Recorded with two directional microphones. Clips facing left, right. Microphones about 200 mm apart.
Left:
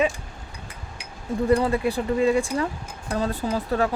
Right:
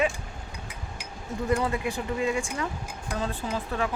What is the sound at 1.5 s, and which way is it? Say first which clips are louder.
Speech: left 6 dB; 35° left (ahead or behind).